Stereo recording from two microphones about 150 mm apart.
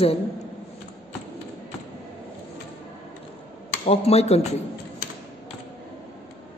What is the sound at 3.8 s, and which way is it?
Speech, 40° left (ahead or behind).